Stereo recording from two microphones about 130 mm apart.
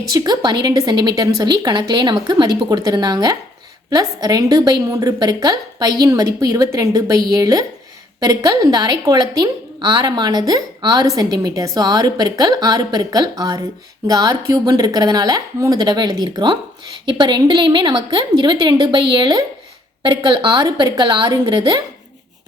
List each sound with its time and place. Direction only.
0.1 s a woman's voice: 30° right (ahead or behind)